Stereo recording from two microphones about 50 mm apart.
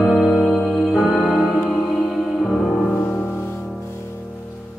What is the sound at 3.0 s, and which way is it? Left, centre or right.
Music, left.